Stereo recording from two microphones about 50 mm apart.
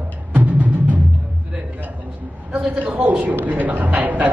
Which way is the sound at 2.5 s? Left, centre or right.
Right.